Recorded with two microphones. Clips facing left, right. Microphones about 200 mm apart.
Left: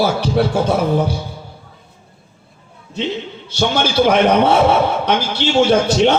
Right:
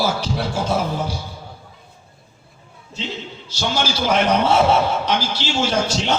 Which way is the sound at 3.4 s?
60° left (ahead or behind).